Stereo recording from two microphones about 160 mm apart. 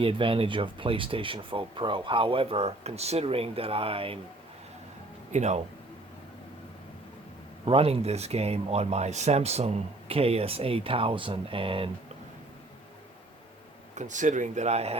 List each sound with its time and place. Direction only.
0.0 s speech: 35° right (ahead or behind)
5.3 s speech: 45° right (ahead or behind)
7.6 s speech: 35° right (ahead or behind)
13.9 s speech: 50° right (ahead or behind)